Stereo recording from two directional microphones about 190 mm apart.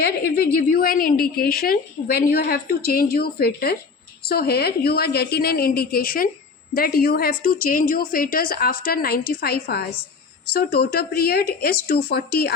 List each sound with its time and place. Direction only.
0.0 s a woman's voice: 55° left (ahead or behind)